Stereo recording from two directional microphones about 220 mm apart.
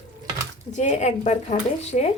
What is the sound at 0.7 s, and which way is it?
Speech, 30° left (ahead or behind).